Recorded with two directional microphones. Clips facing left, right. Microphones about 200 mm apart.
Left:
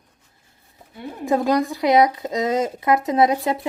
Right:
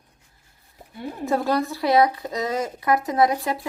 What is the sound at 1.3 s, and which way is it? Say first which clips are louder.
Speech: left 4 dB; 15° left (ahead or behind).